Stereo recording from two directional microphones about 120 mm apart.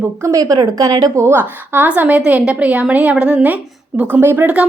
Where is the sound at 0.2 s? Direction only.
25° right (ahead or behind).